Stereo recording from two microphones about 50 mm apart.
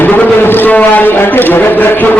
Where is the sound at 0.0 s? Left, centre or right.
Left.